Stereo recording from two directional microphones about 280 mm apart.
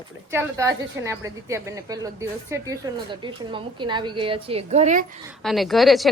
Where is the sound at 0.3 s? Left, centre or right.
Centre.